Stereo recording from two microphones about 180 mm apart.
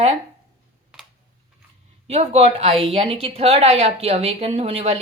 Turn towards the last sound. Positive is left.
turn(degrees=-35)  # may be behind; listen again after turning